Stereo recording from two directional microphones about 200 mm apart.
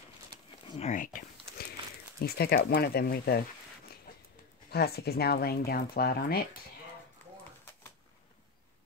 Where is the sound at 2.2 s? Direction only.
50° left (ahead or behind).